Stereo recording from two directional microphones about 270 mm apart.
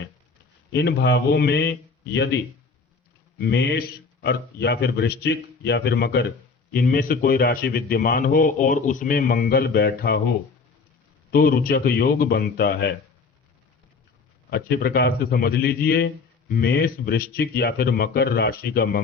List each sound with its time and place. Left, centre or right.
0.7 s a man's voice: left
3.4 s a man's voice: left
11.3 s a man's voice: left
14.5 s a man's voice: left